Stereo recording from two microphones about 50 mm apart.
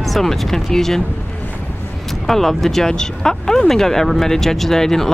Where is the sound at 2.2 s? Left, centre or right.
Centre.